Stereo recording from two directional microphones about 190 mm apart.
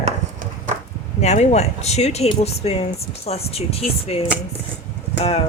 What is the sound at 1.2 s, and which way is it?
Speech, 35° left (ahead or behind).